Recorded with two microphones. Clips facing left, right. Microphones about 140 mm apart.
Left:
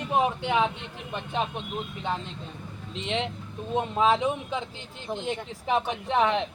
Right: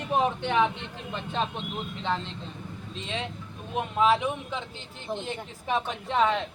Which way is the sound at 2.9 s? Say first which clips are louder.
Left 5 dB; 20° left (ahead or behind).